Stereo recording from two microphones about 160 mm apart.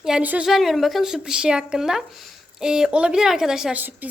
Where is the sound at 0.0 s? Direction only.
5° right (ahead or behind).